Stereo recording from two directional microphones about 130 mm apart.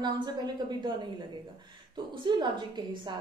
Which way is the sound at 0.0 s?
30° right (ahead or behind).